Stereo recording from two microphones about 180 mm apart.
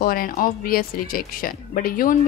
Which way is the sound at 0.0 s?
50° left (ahead or behind).